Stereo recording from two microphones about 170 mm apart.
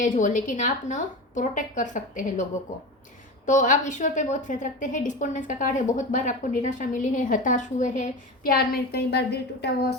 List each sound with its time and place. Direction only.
0.0 s a woman's voice: 50° left (ahead or behind)
8.5 s a woman's voice: 65° left (ahead or behind)